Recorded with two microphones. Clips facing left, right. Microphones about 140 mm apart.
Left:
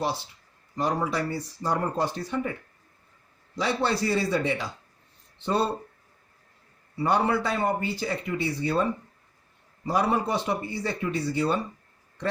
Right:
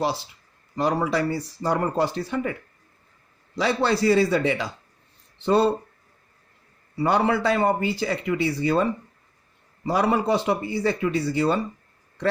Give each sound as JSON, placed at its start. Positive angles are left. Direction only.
{"t": 0.8, "sound": "speech", "side_deg": -85}
{"t": 7.0, "sound": "speech", "side_deg": -90}